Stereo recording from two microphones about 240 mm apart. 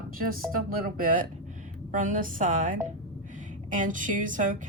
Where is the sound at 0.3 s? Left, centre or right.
Right.